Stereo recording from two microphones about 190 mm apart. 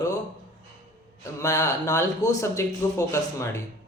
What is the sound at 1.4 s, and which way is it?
A man's voice, 15° left (ahead or behind).